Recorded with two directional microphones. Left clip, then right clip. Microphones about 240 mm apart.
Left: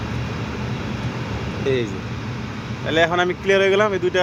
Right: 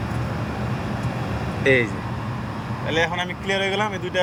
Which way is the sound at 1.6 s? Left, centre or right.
Centre.